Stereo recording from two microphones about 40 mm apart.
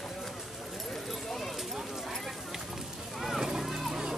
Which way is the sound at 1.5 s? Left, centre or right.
Centre.